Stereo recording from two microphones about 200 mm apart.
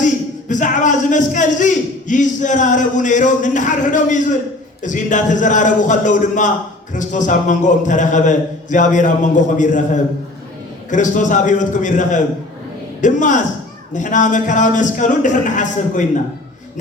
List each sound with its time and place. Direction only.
0.0 s speech: 40° left (ahead or behind)